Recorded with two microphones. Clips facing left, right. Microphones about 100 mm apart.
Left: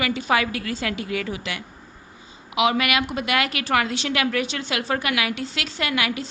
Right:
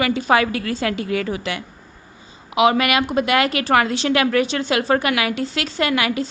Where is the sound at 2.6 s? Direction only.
35° right (ahead or behind).